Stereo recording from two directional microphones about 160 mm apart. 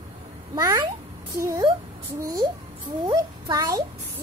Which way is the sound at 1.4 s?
20° right (ahead or behind).